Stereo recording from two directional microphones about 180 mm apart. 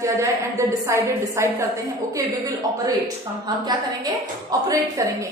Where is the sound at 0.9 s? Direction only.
15° right (ahead or behind).